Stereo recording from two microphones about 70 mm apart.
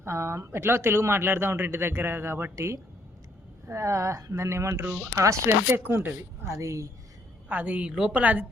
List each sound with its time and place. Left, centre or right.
0.0 s speech: right
2.6 s speech: right
5.7 s speech: right
6.4 s speech: right
7.4 s a woman's voice: right